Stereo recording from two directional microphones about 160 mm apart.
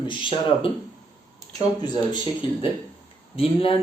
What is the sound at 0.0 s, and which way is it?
Speech, 30° left (ahead or behind).